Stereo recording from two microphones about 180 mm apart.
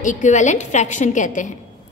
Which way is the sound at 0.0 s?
45° left (ahead or behind).